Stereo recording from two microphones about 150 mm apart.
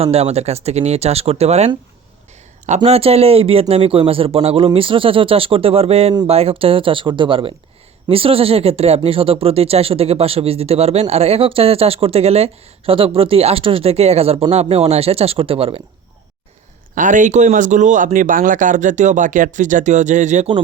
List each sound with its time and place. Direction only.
0.0 s speech: 45° right (ahead or behind)
16.9 s speech: 60° right (ahead or behind)